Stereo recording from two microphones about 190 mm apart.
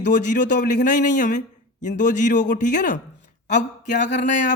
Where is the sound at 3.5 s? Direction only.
65° left (ahead or behind).